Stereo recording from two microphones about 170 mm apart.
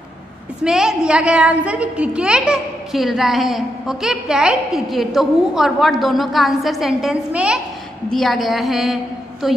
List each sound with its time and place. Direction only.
0.7 s a woman's voice: 5° right (ahead or behind)